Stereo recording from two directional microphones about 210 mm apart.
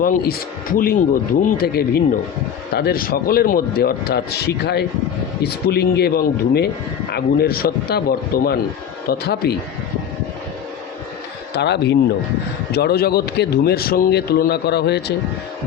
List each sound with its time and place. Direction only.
0.0 s a man's voice: 40° left (ahead or behind)
11.5 s a man's voice: 55° left (ahead or behind)